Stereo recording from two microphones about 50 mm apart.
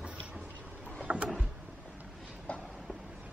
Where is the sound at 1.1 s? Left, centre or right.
Right.